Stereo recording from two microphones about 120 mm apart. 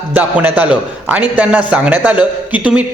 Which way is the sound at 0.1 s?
15° right (ahead or behind).